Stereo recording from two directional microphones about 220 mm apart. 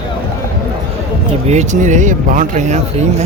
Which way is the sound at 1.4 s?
30° right (ahead or behind).